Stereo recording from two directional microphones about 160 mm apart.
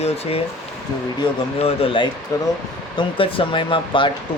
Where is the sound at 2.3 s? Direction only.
20° left (ahead or behind).